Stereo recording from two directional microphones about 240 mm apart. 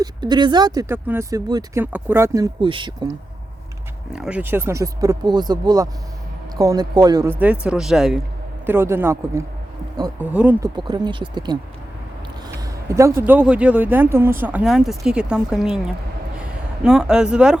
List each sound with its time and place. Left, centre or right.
0.0 s speech: centre
4.1 s speech: centre
10.8 s speech: centre